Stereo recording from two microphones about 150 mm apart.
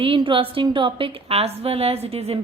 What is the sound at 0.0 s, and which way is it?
A woman's voice, 35° right (ahead or behind).